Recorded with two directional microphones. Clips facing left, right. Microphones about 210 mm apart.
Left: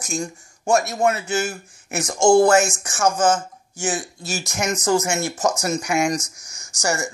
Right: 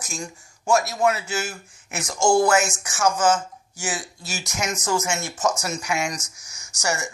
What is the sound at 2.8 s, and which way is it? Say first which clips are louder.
Speech: left 2 dB; 50° left (ahead or behind).